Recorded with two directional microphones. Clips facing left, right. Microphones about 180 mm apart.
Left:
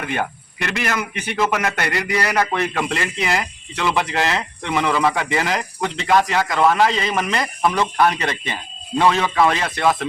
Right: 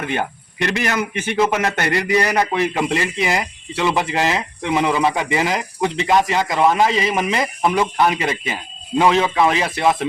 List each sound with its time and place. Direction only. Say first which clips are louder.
0.0 s speech: right 1 dB; 25° right (ahead or behind)
2.7 s speech: right 3 dB; 5° right (ahead or behind)
4.8 s speech: even; 20° right (ahead or behind)
6.1 s speech: left 1 dB; 20° right (ahead or behind)
9.0 s speech: right 1 dB; 20° right (ahead or behind)